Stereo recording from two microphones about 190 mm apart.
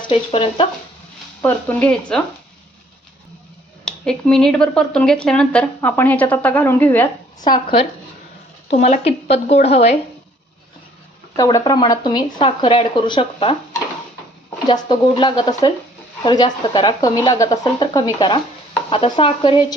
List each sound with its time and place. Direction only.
0.1 s speech: 30° left (ahead or behind)
1.4 s speech: 10° left (ahead or behind)
3.8 s speech: 5° left (ahead or behind)
7.3 s speech: 20° left (ahead or behind)
11.3 s speech: 20° left (ahead or behind)
14.7 s speech: 25° left (ahead or behind)